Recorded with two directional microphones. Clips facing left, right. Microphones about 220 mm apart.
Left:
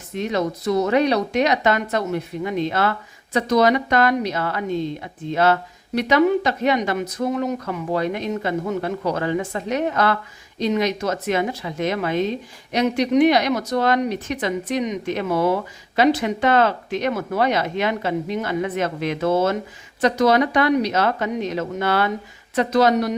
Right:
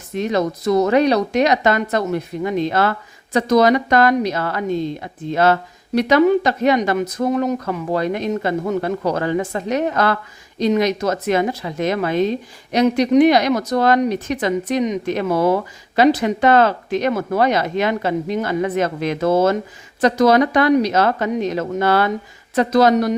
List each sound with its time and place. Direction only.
0.2 s speech: 45° right (ahead or behind)